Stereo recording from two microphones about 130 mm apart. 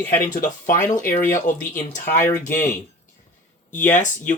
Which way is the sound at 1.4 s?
75° left (ahead or behind).